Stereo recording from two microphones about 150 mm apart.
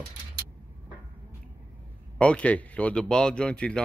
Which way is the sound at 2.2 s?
10° left (ahead or behind).